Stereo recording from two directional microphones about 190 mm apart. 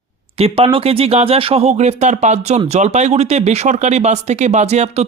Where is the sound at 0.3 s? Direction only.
30° right (ahead or behind).